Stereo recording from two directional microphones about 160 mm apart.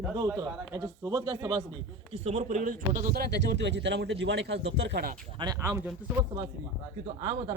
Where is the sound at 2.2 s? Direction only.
45° right (ahead or behind); by 5.1 s 80° right.